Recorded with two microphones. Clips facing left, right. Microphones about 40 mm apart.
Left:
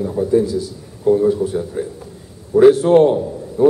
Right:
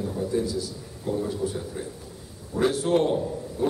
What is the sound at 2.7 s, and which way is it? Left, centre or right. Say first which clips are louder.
Speech: left 12 dB; left.